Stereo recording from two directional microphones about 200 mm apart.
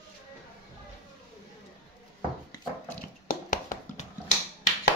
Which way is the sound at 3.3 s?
45° left (ahead or behind).